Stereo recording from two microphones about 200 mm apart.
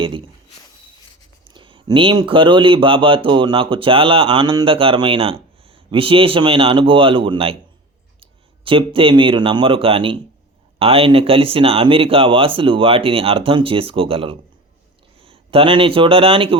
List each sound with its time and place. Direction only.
1.5 s speech: 25° right (ahead or behind)